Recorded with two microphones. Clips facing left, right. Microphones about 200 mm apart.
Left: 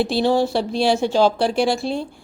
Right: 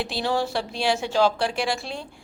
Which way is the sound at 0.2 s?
25° left (ahead or behind).